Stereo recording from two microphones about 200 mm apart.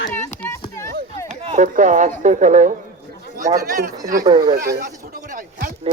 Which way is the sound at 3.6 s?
50° right (ahead or behind).